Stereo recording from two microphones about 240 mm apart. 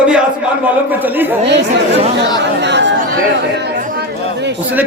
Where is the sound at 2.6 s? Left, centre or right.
Right.